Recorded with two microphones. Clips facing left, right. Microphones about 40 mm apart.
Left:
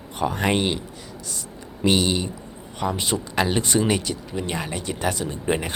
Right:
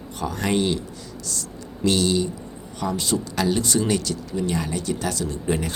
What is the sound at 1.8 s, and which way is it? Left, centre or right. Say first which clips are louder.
Speech: even; left.